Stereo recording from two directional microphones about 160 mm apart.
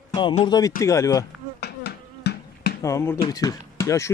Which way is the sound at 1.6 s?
90° left.